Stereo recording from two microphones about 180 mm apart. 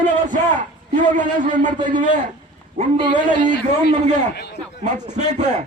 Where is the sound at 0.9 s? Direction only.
45° right (ahead or behind).